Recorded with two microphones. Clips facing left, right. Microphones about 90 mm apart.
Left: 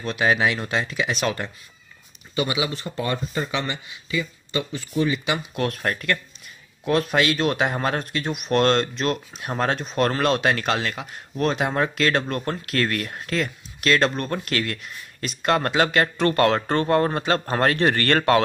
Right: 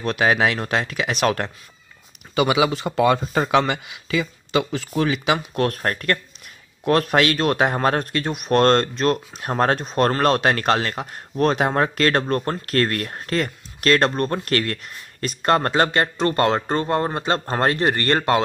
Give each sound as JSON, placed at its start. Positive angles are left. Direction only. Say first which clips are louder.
{"t": 0.0, "sound": "speech", "louder": "right 2 dB", "side_deg": -55}
{"t": 2.3, "sound": "speech", "louder": "right 6 dB", "side_deg": -75}
{"t": 5.5, "sound": "speech", "louder": "right 3 dB", "side_deg": -45}